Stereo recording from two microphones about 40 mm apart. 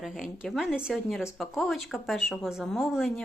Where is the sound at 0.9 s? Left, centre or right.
Centre.